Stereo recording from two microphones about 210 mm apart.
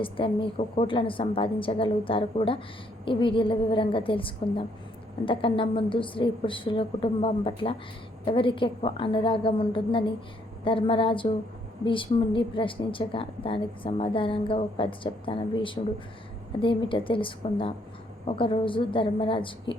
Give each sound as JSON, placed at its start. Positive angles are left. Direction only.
{"t": 0.0, "sound": "a woman's voice", "side_deg": 25}